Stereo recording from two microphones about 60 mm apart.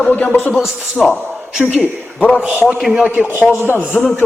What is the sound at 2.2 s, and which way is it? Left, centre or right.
Speech, left.